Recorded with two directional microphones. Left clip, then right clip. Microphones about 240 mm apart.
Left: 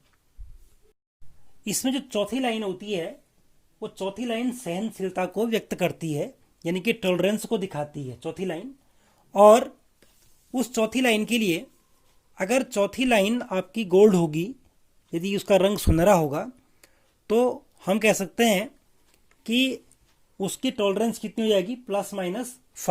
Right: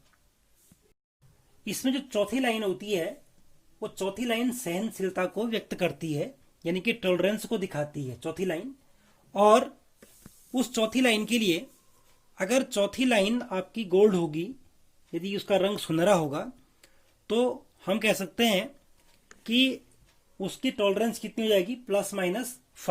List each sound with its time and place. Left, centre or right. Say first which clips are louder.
1.6 s speech: left 3 dB; left
9.3 s speech: left 6 dB; left; by 22.4 s centre